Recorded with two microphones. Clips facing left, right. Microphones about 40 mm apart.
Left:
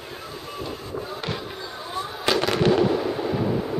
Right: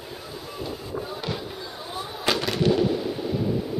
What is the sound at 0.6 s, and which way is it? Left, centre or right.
Train, centre.